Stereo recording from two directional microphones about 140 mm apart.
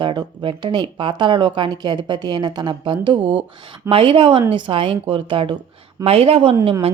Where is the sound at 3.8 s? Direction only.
40° right (ahead or behind).